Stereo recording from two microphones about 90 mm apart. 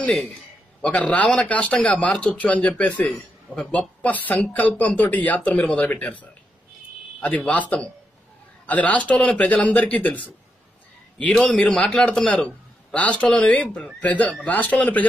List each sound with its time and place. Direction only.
1.1 s speech: 10° left (ahead or behind)